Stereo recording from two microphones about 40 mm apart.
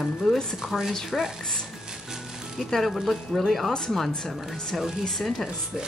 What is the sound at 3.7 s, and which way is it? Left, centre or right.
Speech, centre.